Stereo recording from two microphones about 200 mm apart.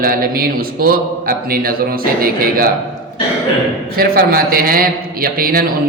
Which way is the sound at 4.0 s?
45° right (ahead or behind).